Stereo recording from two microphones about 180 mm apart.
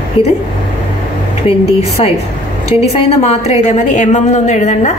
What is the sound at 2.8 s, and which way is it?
A woman's voice, 35° left (ahead or behind).